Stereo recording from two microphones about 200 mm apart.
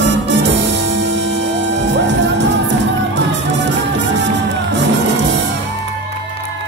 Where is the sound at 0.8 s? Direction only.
65° right (ahead or behind).